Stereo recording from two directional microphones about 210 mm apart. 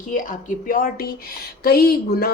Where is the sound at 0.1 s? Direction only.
40° left (ahead or behind).